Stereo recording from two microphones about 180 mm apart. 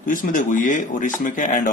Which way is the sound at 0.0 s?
50° left (ahead or behind).